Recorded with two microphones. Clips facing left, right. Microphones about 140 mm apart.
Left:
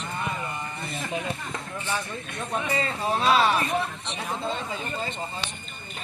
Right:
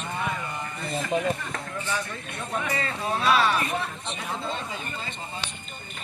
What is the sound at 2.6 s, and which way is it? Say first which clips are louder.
Speech: left 3 dB; 25° left (ahead or behind).